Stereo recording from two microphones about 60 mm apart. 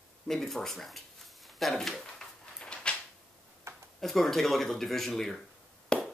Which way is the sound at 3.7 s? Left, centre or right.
Right.